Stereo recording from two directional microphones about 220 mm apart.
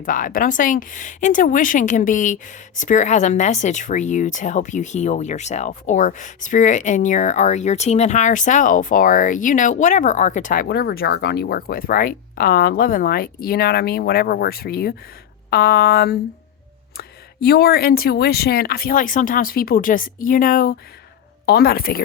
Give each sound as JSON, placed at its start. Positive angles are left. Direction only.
{"t": 0.0, "sound": "speech", "side_deg": 40}